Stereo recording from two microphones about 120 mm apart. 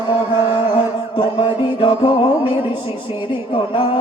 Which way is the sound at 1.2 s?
45° left (ahead or behind).